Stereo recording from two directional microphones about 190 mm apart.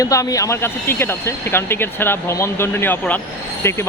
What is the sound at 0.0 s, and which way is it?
Speech, 15° left (ahead or behind).